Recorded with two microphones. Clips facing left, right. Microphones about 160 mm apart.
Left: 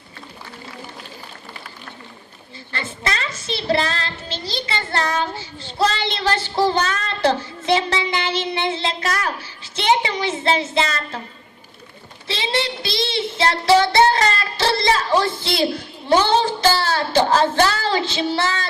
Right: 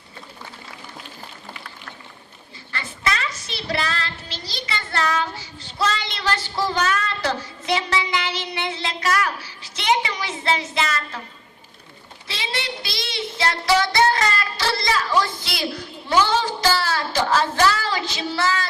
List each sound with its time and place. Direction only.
2.7 s child singing: 30° left (ahead or behind)
12.3 s child singing: 25° left (ahead or behind)